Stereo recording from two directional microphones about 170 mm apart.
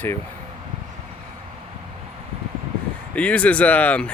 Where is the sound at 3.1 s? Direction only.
10° left (ahead or behind).